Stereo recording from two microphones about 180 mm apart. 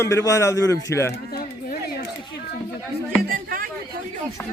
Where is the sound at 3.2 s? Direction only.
50° right (ahead or behind).